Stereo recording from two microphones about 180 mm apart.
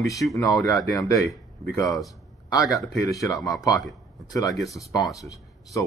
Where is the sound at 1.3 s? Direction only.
Centre (ahead or behind).